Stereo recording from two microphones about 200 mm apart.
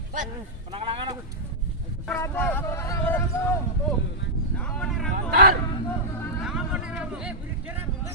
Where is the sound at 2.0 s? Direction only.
10° left (ahead or behind).